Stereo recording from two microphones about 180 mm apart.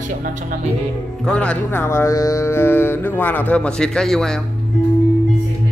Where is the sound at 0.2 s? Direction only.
45° right (ahead or behind).